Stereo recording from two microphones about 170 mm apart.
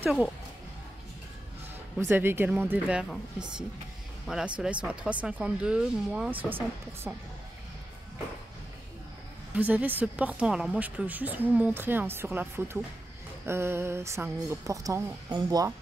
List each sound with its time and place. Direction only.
0.0 s speech: 5° right (ahead or behind)
2.0 s speech: 15° right (ahead or behind)
9.6 s speech: 10° right (ahead or behind)